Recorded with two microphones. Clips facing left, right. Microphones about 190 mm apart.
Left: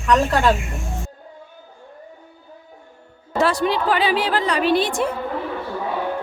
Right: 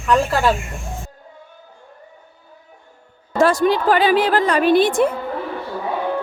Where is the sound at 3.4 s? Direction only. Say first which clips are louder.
Right 4 dB; 45° right (ahead or behind).